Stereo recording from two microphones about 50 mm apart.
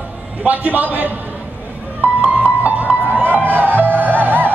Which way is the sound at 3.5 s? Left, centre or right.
Right.